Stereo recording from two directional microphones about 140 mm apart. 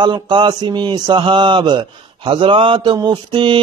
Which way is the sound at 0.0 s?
35° right (ahead or behind).